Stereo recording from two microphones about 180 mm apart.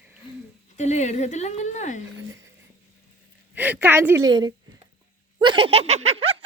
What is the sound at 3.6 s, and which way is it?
Speech, 10° right (ahead or behind).